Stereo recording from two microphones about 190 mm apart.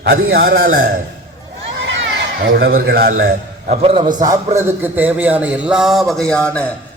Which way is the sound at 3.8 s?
30° right (ahead or behind).